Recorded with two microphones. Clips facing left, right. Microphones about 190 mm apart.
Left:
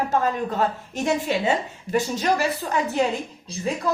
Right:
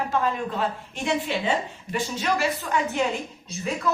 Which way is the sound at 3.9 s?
35° left (ahead or behind).